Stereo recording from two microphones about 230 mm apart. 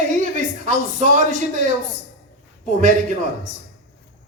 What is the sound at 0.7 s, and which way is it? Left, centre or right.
A man's voice, right.